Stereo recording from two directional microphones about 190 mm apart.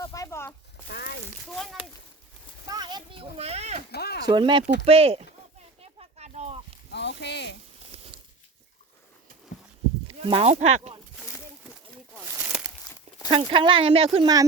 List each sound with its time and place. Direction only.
0.0 s a sound: 15° left (ahead or behind)
0.9 s speech: 60° left (ahead or behind)
1.5 s speech: centre (ahead or behind)
2.6 s speech: 20° right (ahead or behind)
3.9 s speech: 55° left (ahead or behind)
4.3 s speech: 25° right (ahead or behind)
5.8 s a sound: 35° right (ahead or behind)
6.9 s speech: 65° left (ahead or behind)
7.8 s a sound: 30° right (ahead or behind)
10.1 s speech: 30° right (ahead or behind)
12.3 s a sound: 10° right (ahead or behind)
13.3 s speech: 25° right (ahead or behind)